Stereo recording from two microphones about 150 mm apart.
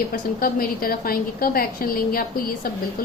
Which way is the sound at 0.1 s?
75° left (ahead or behind).